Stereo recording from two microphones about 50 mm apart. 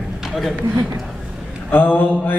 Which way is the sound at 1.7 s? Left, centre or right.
Left.